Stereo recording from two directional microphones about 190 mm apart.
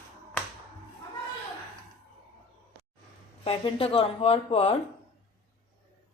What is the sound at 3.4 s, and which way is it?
Speech, 30° left (ahead or behind).